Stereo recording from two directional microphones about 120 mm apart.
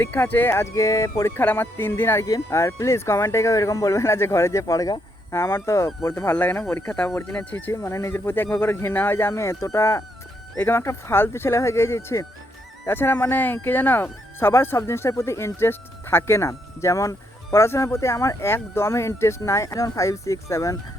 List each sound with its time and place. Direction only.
0.0 s speech: 15° left (ahead or behind)